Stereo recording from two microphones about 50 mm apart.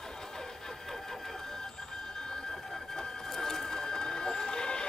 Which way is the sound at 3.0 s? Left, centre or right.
Centre.